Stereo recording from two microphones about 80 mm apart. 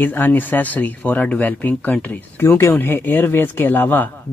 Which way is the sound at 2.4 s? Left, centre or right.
Left.